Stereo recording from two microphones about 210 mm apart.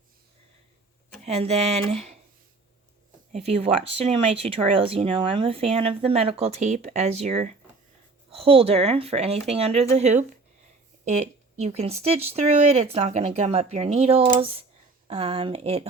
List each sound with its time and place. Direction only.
1.2 s speech: 30° right (ahead or behind)
3.3 s speech: 30° right (ahead or behind)